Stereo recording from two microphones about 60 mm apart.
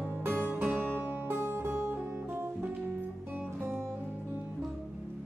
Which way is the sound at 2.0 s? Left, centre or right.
Right.